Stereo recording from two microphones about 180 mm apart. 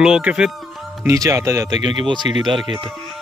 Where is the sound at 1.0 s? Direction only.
20° right (ahead or behind).